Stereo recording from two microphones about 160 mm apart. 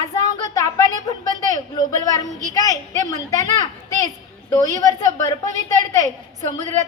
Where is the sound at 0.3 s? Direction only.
20° left (ahead or behind).